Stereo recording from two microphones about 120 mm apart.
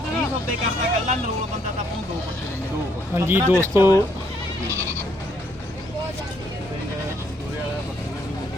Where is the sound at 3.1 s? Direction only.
20° right (ahead or behind).